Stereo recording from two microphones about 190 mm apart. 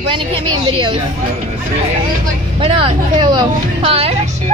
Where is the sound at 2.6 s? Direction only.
25° right (ahead or behind).